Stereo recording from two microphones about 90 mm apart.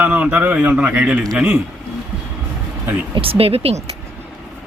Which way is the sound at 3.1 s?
90° right.